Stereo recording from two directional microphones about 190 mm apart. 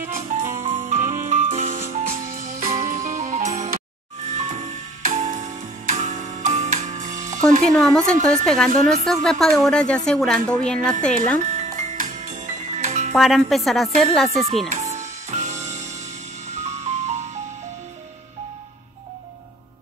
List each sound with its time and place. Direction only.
0.2 s music: 40° right (ahead or behind)
7.6 s a woman's voice: 5° left (ahead or behind)
11.5 s music: 40° right (ahead or behind)
13.1 s a woman's voice: centre (ahead or behind)
14.7 s music: 35° right (ahead or behind)
16.5 s music: 35° right (ahead or behind)